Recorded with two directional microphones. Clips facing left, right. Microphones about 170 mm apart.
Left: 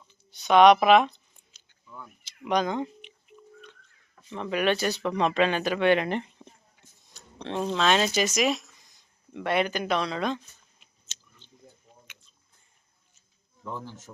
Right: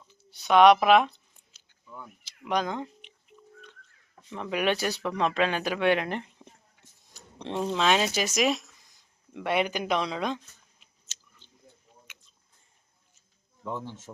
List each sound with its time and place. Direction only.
0.1 s a sound: 5° right (ahead or behind)
2.4 s telephone dialing: centre (ahead or behind)
4.3 s speech: centre (ahead or behind)
13.7 s speech: 20° right (ahead or behind)